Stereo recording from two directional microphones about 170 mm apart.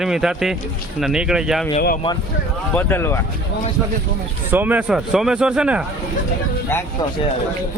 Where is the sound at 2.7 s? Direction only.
15° left (ahead or behind).